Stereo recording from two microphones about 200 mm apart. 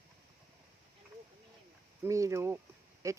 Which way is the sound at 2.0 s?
15° right (ahead or behind).